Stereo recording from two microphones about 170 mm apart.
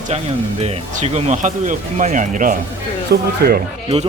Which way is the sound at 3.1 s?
70° right (ahead or behind).